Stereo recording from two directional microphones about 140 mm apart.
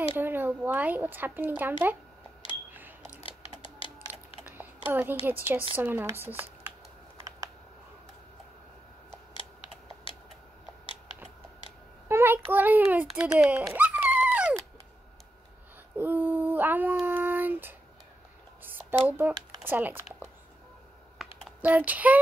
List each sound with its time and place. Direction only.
0.1 s speech: 15° right (ahead or behind)
3.3 s a sound: 40° left (ahead or behind)
4.6 s a sound: 15° right (ahead or behind)
5.2 s speech: 15° right (ahead or behind)
12.1 s a child's voice: 15° right (ahead or behind)
13.4 s dog: 10° right (ahead or behind)
16.0 s a sound: 15° right (ahead or behind)
19.0 s speech: 15° right (ahead or behind)
21.2 s computer keyboard: centre (ahead or behind)
21.5 s speech: 10° right (ahead or behind)